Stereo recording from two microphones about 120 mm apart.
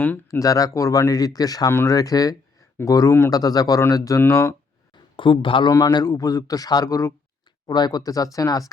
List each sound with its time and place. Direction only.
0.3 s speech: 30° left (ahead or behind)
5.1 s speech: 45° left (ahead or behind)
5.7 s a man's voice: 35° left (ahead or behind)